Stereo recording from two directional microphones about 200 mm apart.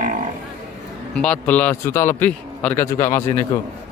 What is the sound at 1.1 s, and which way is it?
A man's voice, 5° left (ahead or behind).